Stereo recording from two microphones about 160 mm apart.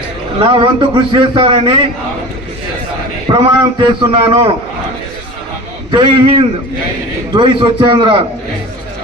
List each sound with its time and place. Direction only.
0.3 s a man's voice: 30° right (ahead or behind)
3.3 s a man's voice: 30° right (ahead or behind)
5.9 s a man's voice: 30° right (ahead or behind)